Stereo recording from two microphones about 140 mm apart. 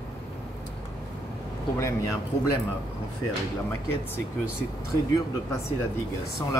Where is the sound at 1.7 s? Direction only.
20° left (ahead or behind).